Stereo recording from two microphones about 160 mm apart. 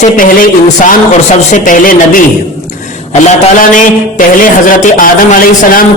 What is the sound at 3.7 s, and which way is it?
A man's voice, 55° left (ahead or behind).